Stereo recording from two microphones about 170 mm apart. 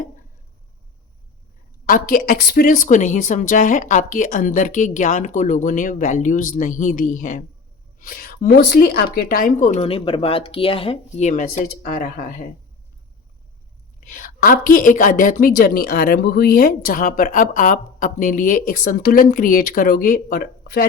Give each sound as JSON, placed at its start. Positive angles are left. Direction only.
{"t": 1.9, "sound": "a woman's voice", "side_deg": 55}
{"t": 14.0, "sound": "a woman's voice", "side_deg": 50}